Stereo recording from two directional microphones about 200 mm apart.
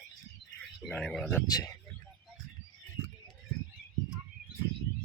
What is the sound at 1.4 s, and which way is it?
Speech, 20° left (ahead or behind).